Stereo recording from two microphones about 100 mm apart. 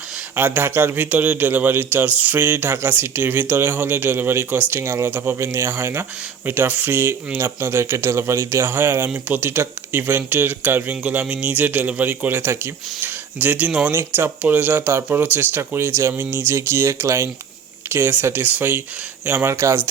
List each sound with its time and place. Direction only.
0.3 s speech: 20° right (ahead or behind)